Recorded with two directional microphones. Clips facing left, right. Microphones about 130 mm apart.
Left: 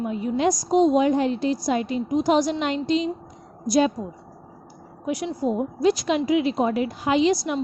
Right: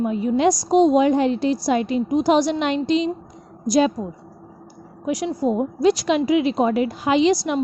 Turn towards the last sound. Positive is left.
turn(degrees=-90)